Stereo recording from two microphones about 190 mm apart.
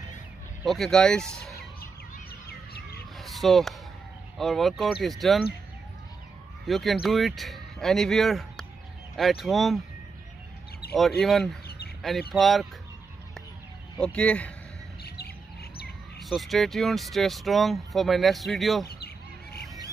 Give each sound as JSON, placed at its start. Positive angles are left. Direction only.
{"t": 0.7, "sound": "speech", "side_deg": 0}
{"t": 3.2, "sound": "a sound", "side_deg": 0}
{"t": 4.4, "sound": "speech", "side_deg": 0}
{"t": 6.6, "sound": "speech", "side_deg": 0}
{"t": 11.0, "sound": "speech", "side_deg": 0}
{"t": 13.9, "sound": "speech", "side_deg": 5}
{"t": 15.0, "sound": "chirp", "side_deg": 55}
{"t": 16.3, "sound": "speech", "side_deg": 0}